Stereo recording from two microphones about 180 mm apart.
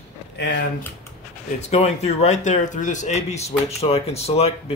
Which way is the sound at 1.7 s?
35° left (ahead or behind).